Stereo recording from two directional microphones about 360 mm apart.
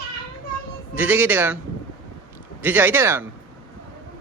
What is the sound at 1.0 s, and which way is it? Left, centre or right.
Speech, centre.